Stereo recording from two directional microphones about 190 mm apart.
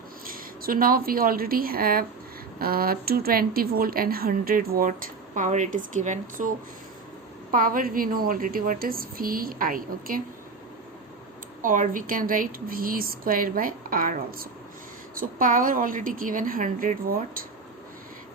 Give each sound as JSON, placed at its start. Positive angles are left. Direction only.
{"t": 0.3, "sound": "a woman's voice", "side_deg": -50}
{"t": 7.5, "sound": "speech", "side_deg": -45}
{"t": 11.6, "sound": "speech", "side_deg": -45}